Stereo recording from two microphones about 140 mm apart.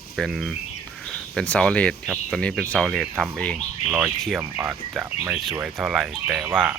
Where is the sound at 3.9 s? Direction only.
10° right (ahead or behind).